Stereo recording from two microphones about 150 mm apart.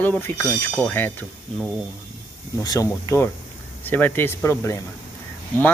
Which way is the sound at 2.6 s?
20° left (ahead or behind).